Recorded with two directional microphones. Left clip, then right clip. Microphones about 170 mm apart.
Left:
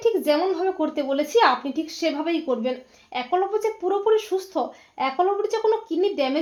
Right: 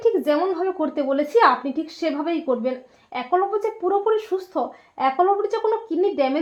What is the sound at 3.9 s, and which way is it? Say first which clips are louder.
Speech: even; 25° right (ahead or behind).